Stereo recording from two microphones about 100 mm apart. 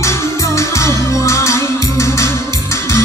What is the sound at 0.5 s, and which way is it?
Music, 30° left (ahead or behind).